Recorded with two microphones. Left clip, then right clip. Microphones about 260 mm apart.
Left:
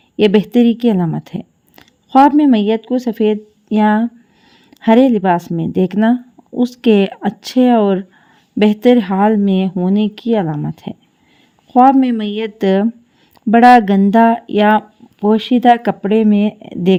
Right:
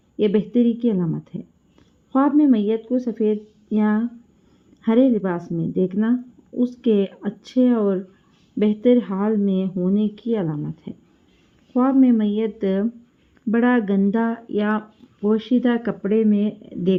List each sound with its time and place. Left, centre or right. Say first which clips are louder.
0.2 s speech: left 8 dB; left